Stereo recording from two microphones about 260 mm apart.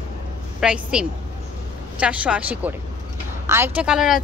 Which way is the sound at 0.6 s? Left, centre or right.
Centre.